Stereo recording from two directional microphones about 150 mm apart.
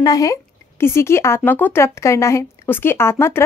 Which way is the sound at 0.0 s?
25° left (ahead or behind).